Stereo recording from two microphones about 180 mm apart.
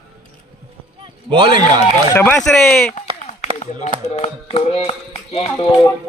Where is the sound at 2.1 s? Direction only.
15° left (ahead or behind).